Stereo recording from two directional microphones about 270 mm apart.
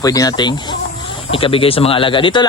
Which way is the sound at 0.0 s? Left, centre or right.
Centre.